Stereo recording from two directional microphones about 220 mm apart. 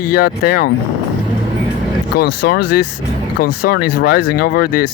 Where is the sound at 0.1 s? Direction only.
45° left (ahead or behind).